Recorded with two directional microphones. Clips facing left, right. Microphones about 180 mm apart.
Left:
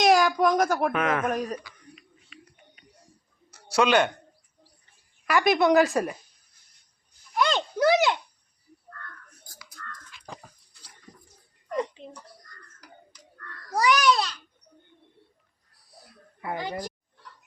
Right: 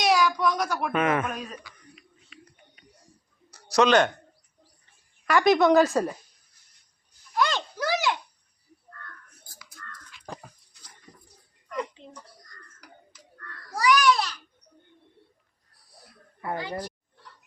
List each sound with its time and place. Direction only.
0.0 s a sound: 45° left (ahead or behind)
0.9 s a man's voice: 5° right (ahead or behind)
1.2 s a man's voice: 45° left (ahead or behind)
3.8 s speech: 10° left (ahead or behind)
5.2 s speech: 10° left (ahead or behind)
7.3 s a sound: 20° left (ahead or behind)
13.7 s babbling: 20° left (ahead or behind)
16.4 s speech: 15° left (ahead or behind)